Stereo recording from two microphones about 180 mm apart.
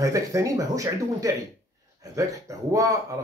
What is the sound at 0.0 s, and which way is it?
Speech, 15° right (ahead or behind).